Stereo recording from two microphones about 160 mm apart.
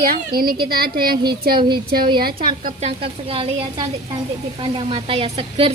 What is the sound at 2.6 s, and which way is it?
A woman's voice, 45° right (ahead or behind).